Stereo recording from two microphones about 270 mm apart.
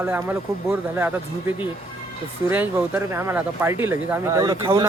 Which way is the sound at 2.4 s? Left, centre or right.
Centre.